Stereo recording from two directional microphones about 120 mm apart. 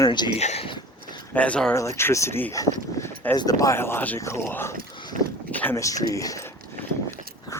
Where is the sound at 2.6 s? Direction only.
20° left (ahead or behind).